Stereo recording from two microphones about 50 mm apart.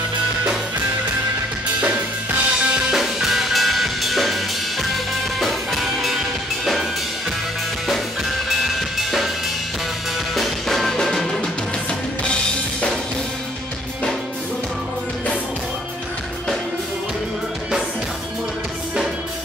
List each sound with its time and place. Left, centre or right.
1.8 s drum kit: right
2.9 s drum kit: centre
5.4 s music: centre
7.9 s drum kit: centre
10.3 s music: centre